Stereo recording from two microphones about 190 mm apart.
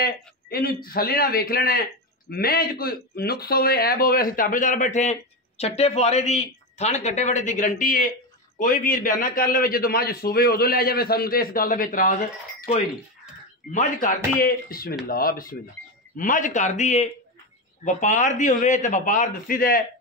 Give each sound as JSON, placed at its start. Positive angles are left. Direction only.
{"t": 0.0, "sound": "a man's voice", "side_deg": 55}
{"t": 13.7, "sound": "a man's voice", "side_deg": 40}